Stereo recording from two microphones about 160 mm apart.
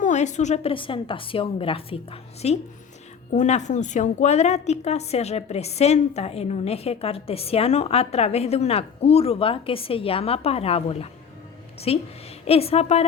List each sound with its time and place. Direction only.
0.0 s a woman's voice: 50° left (ahead or behind)